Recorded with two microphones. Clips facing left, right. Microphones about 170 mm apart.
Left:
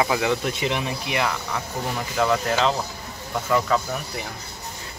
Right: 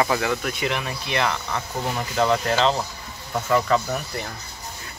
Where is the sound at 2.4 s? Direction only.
5° left (ahead or behind).